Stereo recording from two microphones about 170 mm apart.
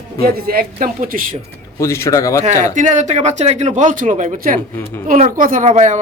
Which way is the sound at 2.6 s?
45° right (ahead or behind).